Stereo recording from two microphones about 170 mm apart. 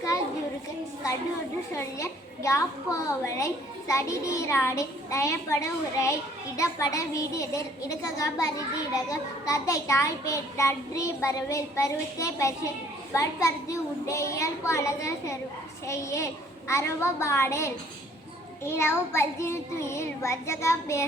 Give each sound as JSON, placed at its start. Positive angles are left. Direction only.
{"t": 1.7, "sound": "a child's voice", "side_deg": 15}